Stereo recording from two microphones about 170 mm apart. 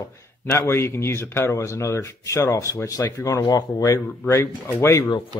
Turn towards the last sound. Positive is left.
turn(degrees=25)  # may be behind; listen again after turning